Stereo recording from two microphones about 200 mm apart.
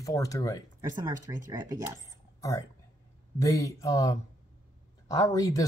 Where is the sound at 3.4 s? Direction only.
15° left (ahead or behind).